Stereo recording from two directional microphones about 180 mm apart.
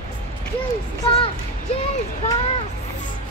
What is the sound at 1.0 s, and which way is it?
Speech, 30° left (ahead or behind).